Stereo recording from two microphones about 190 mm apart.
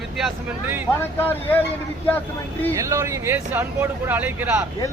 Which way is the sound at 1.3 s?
10° left (ahead or behind).